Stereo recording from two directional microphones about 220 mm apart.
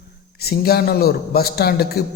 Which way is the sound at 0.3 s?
45° left (ahead or behind).